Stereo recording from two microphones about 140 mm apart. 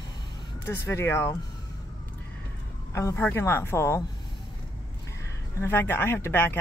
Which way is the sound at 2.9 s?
20° left (ahead or behind).